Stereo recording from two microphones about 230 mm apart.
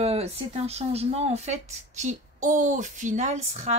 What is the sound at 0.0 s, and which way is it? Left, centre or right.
Speech, right.